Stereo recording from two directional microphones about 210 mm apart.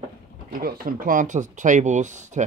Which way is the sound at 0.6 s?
45° right (ahead or behind).